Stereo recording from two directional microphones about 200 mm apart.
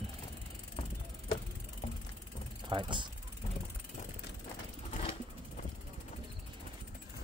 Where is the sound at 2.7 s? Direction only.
25° right (ahead or behind).